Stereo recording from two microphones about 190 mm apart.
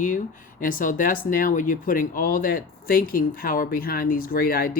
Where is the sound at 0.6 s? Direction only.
45° left (ahead or behind).